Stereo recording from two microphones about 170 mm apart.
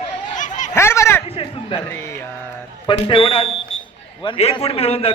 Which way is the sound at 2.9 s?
30° left (ahead or behind).